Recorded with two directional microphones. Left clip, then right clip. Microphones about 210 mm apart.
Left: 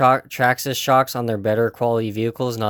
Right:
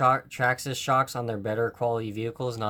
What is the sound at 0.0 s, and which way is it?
Speech, 45° left (ahead or behind).